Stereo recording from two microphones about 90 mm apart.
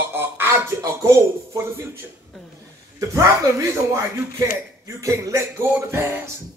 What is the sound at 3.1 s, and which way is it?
Speech, 35° right (ahead or behind).